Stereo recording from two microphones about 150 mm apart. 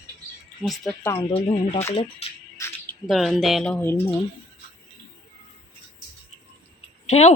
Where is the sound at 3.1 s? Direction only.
Centre (ahead or behind).